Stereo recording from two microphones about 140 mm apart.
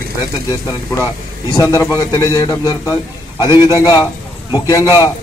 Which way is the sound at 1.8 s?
25° left (ahead or behind).